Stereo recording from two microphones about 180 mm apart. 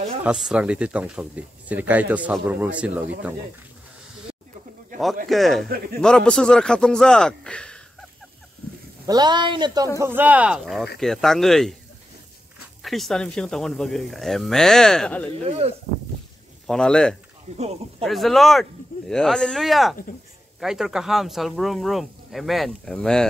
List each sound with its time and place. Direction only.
0.2 s speech: 5° right (ahead or behind)
5.3 s speech: centre (ahead or behind)
9.0 s speech: 20° right (ahead or behind)
9.9 s speech: 10° right (ahead or behind)
12.8 s speech: centre (ahead or behind)
15.6 s speech: 35° right (ahead or behind)
16.6 s speech: 5° left (ahead or behind)
17.6 s speech: 35° right (ahead or behind)
18.0 s speech: centre (ahead or behind)